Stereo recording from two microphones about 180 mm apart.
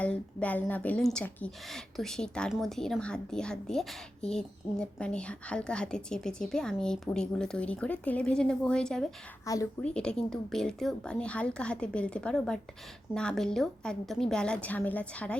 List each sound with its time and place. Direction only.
0.0 s speech: 5° left (ahead or behind)
9.5 s a woman's voice: 20° left (ahead or behind)
9.8 s speech: 5° left (ahead or behind)